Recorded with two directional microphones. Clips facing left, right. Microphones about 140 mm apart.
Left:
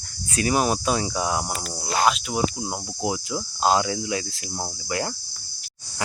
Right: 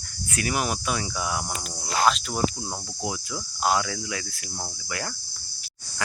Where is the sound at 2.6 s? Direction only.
20° left (ahead or behind).